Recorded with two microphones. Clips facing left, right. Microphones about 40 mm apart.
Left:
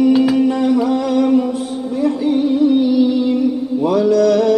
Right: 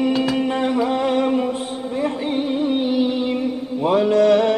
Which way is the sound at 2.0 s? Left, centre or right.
Right.